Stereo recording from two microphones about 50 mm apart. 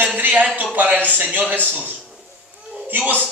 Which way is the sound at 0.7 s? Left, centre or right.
Right.